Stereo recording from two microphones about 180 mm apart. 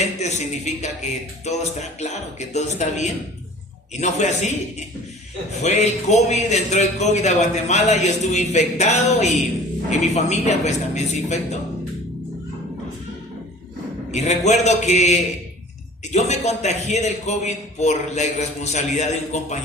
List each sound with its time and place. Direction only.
0.2 s a man's voice: 40° left (ahead or behind)
14.1 s a man's voice: 40° left (ahead or behind)